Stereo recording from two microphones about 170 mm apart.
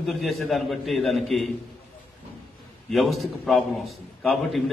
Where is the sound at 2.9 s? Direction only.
Centre (ahead or behind).